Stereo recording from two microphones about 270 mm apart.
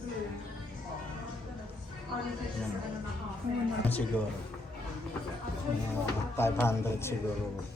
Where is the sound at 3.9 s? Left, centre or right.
Centre.